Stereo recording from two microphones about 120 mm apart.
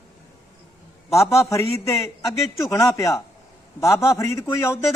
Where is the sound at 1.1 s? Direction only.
25° left (ahead or behind).